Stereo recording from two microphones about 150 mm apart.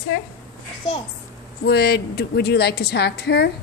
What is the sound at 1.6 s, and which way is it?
A woman's voice, 90° left.